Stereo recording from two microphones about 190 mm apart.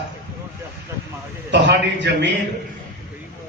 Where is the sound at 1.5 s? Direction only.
65° right (ahead or behind).